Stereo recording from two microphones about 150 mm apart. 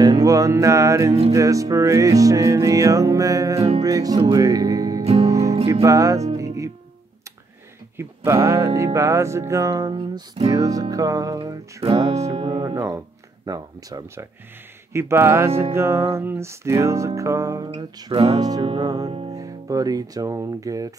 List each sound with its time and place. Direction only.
0.0 s music: 25° right (ahead or behind)
4.2 s speech: 25° right (ahead or behind)
5.0 s music: 40° right (ahead or behind)
5.3 s music: 20° right (ahead or behind)
8.0 s music: 20° right (ahead or behind); by 10.5 s 35° right (ahead or behind)
10.5 s music: 25° right (ahead or behind)
14.9 s speech: 15° right (ahead or behind)
15.7 s music: 15° right (ahead or behind)
19.0 s music: 40° right (ahead or behind)
19.4 s music: 25° right (ahead or behind)